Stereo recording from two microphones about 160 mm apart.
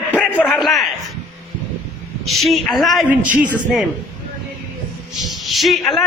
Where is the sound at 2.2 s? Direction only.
Centre (ahead or behind).